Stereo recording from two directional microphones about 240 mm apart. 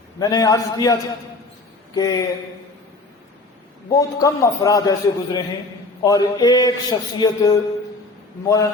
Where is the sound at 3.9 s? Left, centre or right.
Centre.